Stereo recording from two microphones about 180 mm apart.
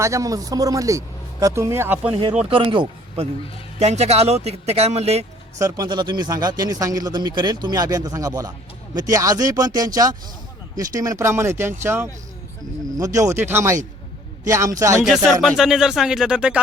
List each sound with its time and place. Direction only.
0.0 s speech: 15° right (ahead or behind)
2.5 s a man's voice: 30° right (ahead or behind)
5.5 s speech: 20° right (ahead or behind)
15.0 s speech: centre (ahead or behind)